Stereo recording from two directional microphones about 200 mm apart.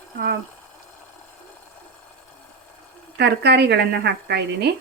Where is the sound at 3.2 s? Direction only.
55° right (ahead or behind).